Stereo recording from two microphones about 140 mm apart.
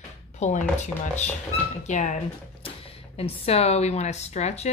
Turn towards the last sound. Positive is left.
turn(degrees=50)  # may be behind; listen again after turning